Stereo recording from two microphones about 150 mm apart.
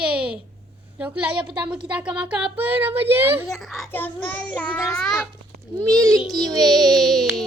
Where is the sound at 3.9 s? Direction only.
10° left (ahead or behind).